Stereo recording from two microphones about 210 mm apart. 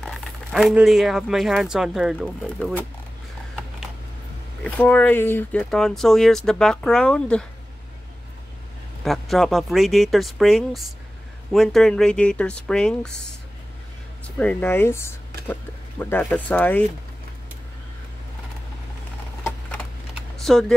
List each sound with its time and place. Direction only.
0.0 s speech: centre (ahead or behind)
4.6 s speech: 5° left (ahead or behind)
9.0 s speech: centre (ahead or behind)
14.2 s speech: 5° left (ahead or behind)
20.2 s a sound: centre (ahead or behind)